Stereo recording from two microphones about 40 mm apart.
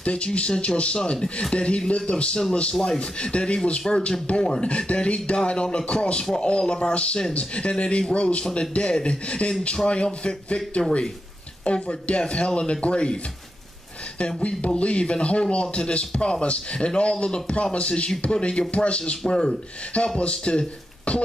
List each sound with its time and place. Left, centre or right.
0.0 s speech: left